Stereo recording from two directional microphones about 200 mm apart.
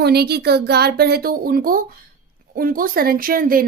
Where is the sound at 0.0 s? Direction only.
55° right (ahead or behind).